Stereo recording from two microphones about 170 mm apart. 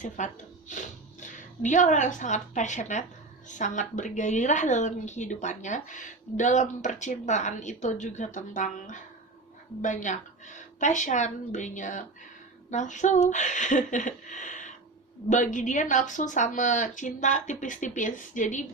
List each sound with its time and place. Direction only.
0.2 s a woman's voice: 45° left (ahead or behind)